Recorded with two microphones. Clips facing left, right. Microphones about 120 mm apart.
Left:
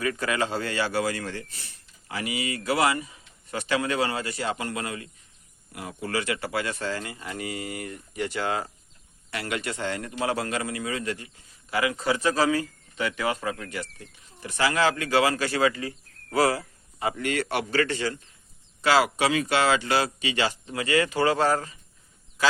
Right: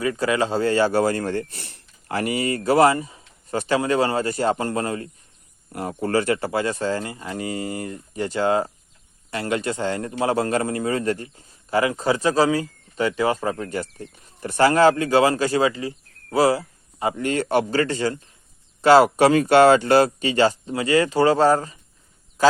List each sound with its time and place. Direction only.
0.0 s a man's voice: 25° right (ahead or behind)